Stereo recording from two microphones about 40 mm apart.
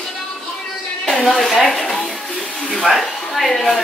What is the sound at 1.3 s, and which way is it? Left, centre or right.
Speech, centre.